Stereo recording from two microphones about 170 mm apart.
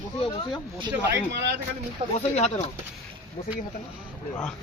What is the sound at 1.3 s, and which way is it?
Speech, 90° right.